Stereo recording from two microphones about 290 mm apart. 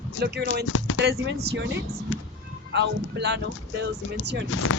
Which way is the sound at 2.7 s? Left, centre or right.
Right.